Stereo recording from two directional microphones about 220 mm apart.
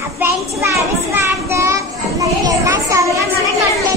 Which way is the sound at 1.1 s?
10° right (ahead or behind).